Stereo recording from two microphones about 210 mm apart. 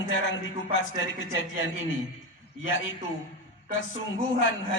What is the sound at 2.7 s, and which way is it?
Speech, 65° left (ahead or behind).